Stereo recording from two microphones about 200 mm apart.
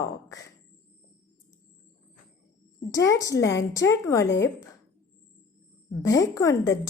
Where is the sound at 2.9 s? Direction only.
15° left (ahead or behind).